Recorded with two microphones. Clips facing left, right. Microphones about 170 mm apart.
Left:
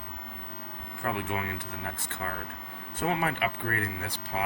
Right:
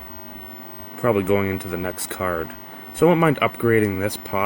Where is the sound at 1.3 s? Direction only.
90° right.